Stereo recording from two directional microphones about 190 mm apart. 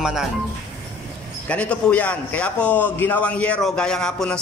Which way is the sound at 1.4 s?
5° left (ahead or behind).